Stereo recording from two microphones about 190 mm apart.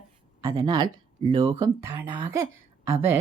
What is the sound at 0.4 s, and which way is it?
Speech, 20° right (ahead or behind).